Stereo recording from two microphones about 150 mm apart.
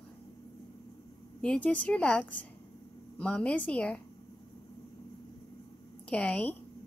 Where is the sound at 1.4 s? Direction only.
10° left (ahead or behind).